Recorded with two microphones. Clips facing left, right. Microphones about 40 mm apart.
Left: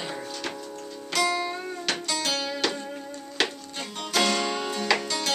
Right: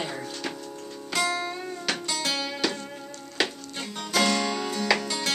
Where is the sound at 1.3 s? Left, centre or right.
Centre.